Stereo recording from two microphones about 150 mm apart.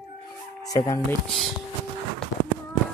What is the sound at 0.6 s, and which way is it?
Speech, 20° left (ahead or behind).